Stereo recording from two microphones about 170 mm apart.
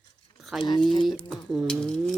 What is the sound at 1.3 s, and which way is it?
Speech, centre (ahead or behind).